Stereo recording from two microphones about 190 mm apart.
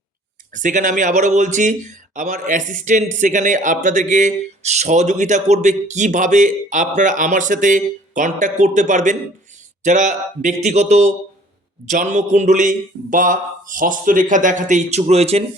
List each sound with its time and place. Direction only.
0.5 s speech: 40° right (ahead or behind)